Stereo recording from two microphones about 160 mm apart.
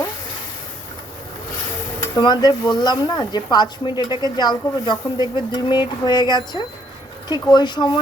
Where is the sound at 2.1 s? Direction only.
25° left (ahead or behind).